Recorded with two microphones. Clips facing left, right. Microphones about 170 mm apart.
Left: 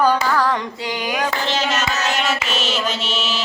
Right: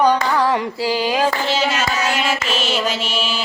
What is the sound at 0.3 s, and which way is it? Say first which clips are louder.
Female singing: right 2 dB; 25° right (ahead or behind).